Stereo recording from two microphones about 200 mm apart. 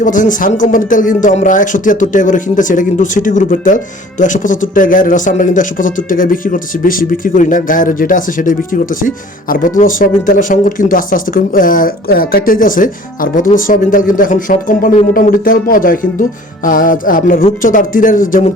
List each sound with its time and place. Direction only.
0.0 s speech: 40° left (ahead or behind)